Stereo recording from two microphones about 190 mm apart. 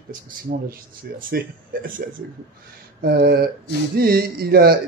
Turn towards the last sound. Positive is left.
turn(degrees=-55)  # may be behind; listen again after turning